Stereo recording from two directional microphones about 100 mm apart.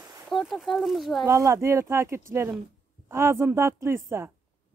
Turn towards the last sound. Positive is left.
turn(degrees=-25)  # may be behind; listen again after turning